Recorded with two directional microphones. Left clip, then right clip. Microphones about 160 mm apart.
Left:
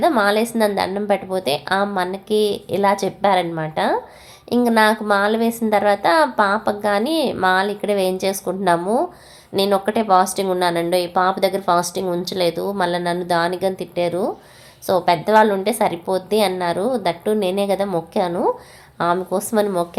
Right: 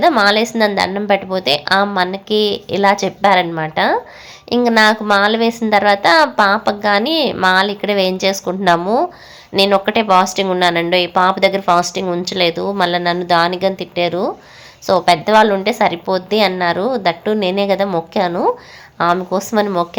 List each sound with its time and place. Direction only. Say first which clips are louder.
0.0 s speech: right 5 dB; 20° right (ahead or behind)